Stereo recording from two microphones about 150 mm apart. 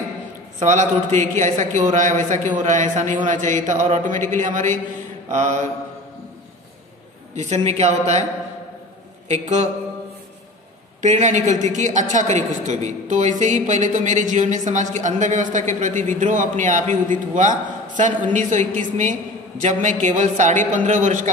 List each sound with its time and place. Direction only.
0.6 s a woman's voice: 50° right (ahead or behind)
7.3 s a man's voice: 45° right (ahead or behind)
9.3 s a man's voice: 50° right (ahead or behind)
11.0 s a woman's voice: 55° right (ahead or behind)